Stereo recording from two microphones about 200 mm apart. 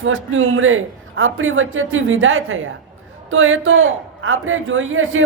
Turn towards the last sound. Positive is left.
turn(degrees=-85)